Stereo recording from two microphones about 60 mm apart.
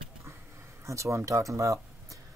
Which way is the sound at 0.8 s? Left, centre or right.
Right.